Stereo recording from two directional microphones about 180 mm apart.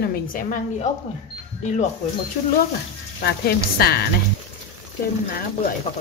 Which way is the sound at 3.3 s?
60° left (ahead or behind).